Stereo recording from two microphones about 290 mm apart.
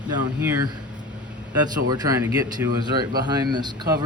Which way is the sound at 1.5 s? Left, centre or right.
Centre.